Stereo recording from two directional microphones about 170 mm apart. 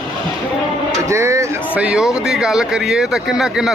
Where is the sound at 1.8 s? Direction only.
5° right (ahead or behind).